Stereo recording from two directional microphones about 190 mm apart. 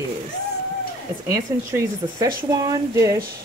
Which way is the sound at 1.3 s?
15° right (ahead or behind).